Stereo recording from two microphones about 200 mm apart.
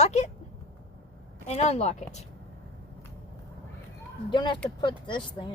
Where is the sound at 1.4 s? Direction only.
30° left (ahead or behind).